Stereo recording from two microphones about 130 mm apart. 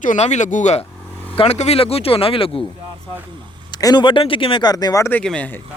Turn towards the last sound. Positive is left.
turn(degrees=10)  # may be behind; listen again after turning